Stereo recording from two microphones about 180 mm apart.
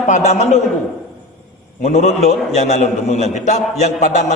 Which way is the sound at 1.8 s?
40° left (ahead or behind).